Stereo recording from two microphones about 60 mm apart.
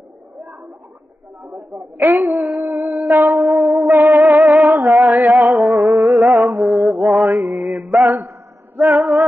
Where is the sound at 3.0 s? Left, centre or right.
Right.